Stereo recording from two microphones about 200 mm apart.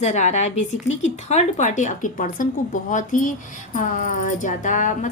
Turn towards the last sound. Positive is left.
turn(degrees=40)  # may be behind; listen again after turning